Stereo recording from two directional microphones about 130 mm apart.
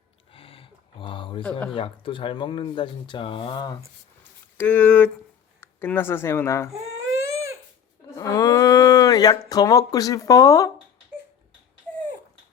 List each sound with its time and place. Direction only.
0.3 s a sound: 45° left (ahead or behind)
1.4 s speech: 10° left (ahead or behind)
1.7 s speech: 40° left (ahead or behind)
4.5 s speech: 10° left (ahead or behind)
8.1 s speech: 25° left (ahead or behind)